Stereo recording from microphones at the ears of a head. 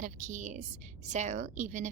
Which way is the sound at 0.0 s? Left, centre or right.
Right.